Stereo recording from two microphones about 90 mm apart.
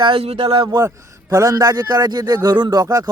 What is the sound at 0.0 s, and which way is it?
Speech, 85° right.